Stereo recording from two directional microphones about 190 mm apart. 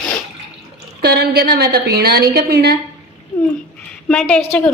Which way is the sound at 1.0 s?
55° right (ahead or behind).